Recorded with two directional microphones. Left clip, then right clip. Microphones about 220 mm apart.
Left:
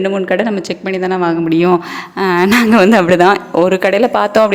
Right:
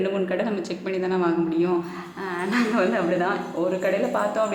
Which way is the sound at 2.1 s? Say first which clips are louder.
Left 15 dB; 50° left (ahead or behind).